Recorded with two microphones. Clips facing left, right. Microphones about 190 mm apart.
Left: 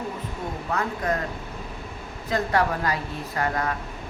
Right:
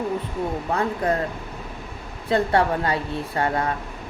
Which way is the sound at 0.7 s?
30° right (ahead or behind).